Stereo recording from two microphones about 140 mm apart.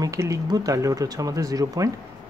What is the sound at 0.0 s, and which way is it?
Speech, 25° right (ahead or behind).